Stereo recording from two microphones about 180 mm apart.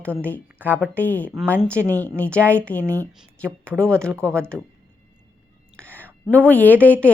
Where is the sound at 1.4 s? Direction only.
10° right (ahead or behind).